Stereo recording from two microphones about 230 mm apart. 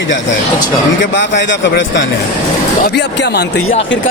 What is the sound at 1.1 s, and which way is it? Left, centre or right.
A man's voice, left.